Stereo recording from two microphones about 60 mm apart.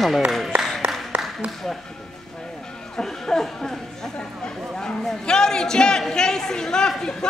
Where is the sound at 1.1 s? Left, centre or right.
Right.